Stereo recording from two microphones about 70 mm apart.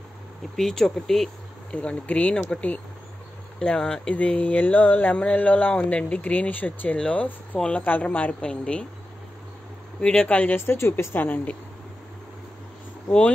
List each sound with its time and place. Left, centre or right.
0.6 s speech: centre
1.7 s speech: centre
7.8 s speech: left
9.9 s speech: centre
10.6 s a woman's voice: left